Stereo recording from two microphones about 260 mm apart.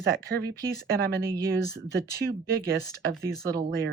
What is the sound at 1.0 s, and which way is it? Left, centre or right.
Speech, right.